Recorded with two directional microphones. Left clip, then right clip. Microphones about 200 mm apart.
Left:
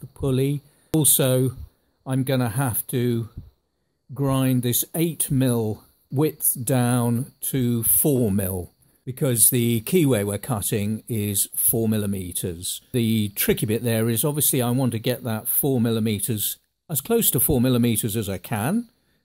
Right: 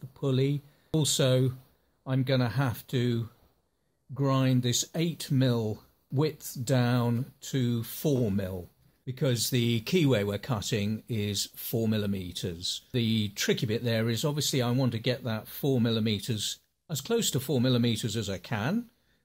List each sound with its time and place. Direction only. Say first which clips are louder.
0.1 s speech: left 5 dB; 30° left (ahead or behind)